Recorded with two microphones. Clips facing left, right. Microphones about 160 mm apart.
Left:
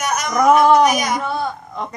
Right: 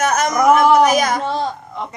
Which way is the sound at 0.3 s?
5° right (ahead or behind).